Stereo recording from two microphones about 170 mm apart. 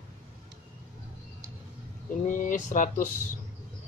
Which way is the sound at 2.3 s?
50° left (ahead or behind).